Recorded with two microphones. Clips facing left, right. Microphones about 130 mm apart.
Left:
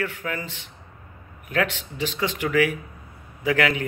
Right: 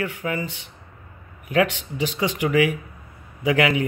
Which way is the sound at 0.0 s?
15° right (ahead or behind).